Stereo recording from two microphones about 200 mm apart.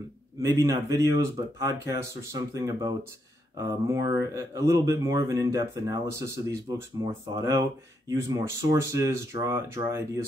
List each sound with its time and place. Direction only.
0.4 s speech: 15° right (ahead or behind)